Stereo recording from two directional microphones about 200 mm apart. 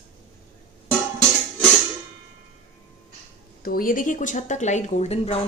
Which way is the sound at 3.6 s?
45° left (ahead or behind).